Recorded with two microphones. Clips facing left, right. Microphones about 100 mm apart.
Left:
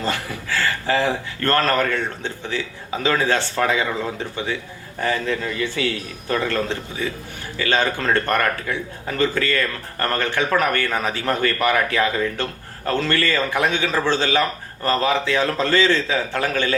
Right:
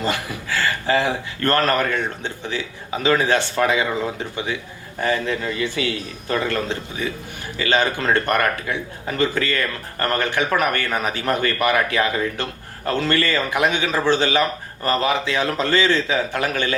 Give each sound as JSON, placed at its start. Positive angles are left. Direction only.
{"t": 0.0, "sound": "a man's voice", "side_deg": -15}